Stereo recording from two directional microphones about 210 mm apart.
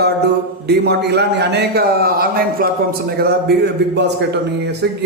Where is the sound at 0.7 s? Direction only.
50° right (ahead or behind).